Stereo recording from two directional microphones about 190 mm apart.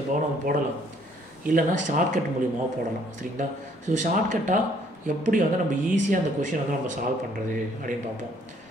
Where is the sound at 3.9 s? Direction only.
40° right (ahead or behind).